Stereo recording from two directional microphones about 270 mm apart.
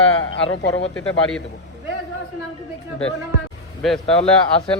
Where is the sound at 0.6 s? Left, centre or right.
Left.